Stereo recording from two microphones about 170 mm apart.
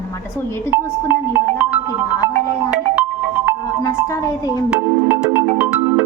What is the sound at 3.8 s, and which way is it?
Speech, 20° left (ahead or behind).